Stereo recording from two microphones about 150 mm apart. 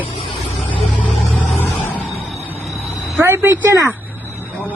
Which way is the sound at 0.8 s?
10° left (ahead or behind).